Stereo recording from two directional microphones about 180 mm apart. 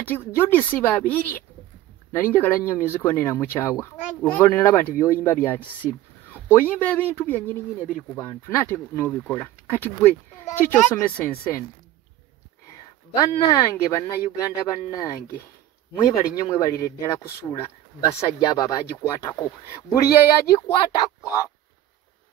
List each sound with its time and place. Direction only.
0.1 s speech: 10° left (ahead or behind)
13.2 s speech: 20° left (ahead or behind)
19.2 s speech: 20° left (ahead or behind)